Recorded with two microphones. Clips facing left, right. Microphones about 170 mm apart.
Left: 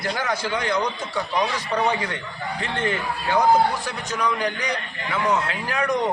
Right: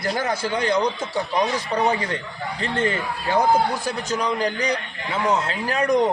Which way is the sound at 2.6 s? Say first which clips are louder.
Right 3 dB; 35° right (ahead or behind).